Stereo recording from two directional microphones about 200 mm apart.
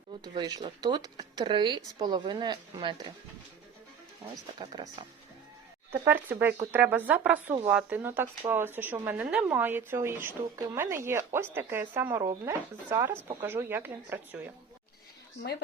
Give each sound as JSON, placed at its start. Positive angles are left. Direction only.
{"t": 0.3, "sound": "speech", "side_deg": -20}
{"t": 4.5, "sound": "speech", "side_deg": -20}
{"t": 5.9, "sound": "speech", "side_deg": -10}